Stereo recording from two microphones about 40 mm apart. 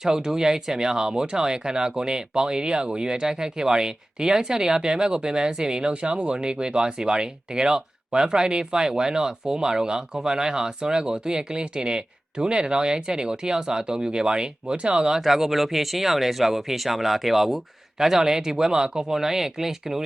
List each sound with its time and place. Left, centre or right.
0.0 s speech: centre
15.2 s speech: centre